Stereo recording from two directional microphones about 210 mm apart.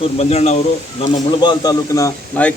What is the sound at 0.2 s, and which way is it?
Speech, 30° left (ahead or behind).